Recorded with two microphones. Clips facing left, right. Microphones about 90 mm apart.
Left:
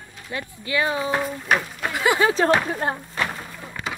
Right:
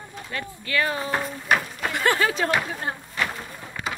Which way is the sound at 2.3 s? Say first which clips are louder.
Left 5 dB; 35° left (ahead or behind).